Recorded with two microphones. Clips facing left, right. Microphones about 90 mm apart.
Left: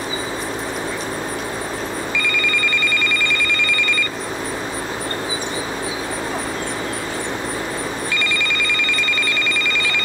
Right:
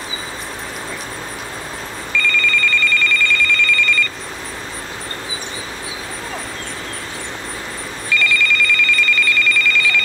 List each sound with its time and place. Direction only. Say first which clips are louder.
2.1 s telephone bell ringing: right 6 dB; 15° left (ahead or behind)
8.1 s telephone bell ringing: right 4 dB; 25° left (ahead or behind)